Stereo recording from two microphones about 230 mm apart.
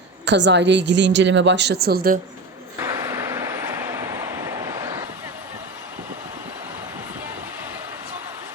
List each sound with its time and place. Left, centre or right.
0.3 s a woman's voice: right
2.8 s vehicle: centre